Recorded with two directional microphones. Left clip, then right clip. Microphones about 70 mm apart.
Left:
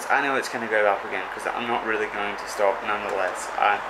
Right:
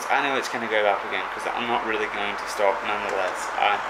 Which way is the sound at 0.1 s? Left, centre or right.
Centre.